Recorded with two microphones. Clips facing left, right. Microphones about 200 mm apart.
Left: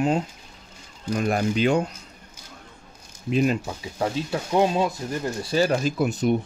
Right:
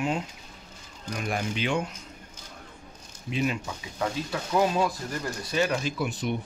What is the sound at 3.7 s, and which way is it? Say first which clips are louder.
Speech: left 4 dB; 30° left (ahead or behind).